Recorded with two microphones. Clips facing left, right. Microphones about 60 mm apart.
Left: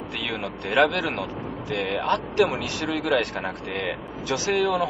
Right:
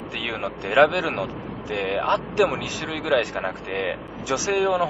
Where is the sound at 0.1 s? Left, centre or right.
Centre.